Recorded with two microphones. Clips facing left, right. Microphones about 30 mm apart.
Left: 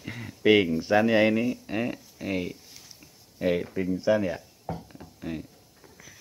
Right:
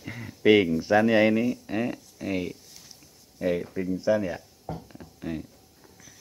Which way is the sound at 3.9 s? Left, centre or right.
Centre.